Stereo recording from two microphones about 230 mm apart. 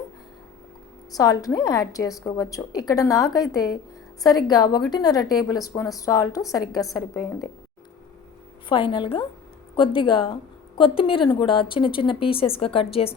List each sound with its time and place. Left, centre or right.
1.1 s a woman's voice: centre
8.7 s a woman's voice: left